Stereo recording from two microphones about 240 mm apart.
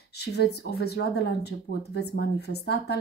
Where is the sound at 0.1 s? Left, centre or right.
Left.